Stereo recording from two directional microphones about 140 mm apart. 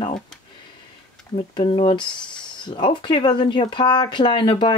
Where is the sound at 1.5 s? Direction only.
40° left (ahead or behind).